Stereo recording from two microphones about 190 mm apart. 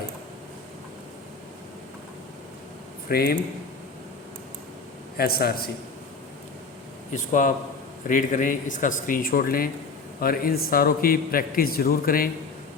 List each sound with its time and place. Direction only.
3.1 s a man's voice: 55° left (ahead or behind)
5.1 s a man's voice: 55° left (ahead or behind)
7.1 s a man's voice: 45° left (ahead or behind)